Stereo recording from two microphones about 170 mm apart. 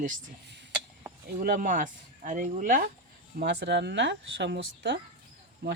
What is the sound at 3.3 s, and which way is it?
Speech, 80° right.